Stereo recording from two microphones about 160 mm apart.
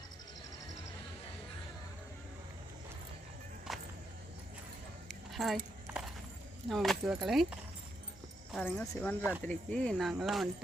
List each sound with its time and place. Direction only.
3.7 s music: centre (ahead or behind)
5.0 s keys jangling: centre (ahead or behind)
6.7 s speech: centre (ahead or behind)
8.6 s speech: 10° left (ahead or behind)